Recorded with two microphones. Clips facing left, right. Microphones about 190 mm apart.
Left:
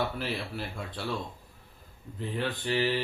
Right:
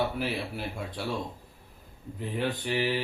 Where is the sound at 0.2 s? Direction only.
15° right (ahead or behind).